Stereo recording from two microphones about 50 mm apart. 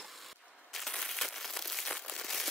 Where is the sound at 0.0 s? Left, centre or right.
Centre.